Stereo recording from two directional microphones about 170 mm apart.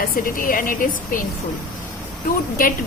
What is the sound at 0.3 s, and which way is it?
Speech, 55° left (ahead or behind).